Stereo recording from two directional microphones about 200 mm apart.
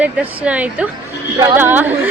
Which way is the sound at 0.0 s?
5° right (ahead or behind).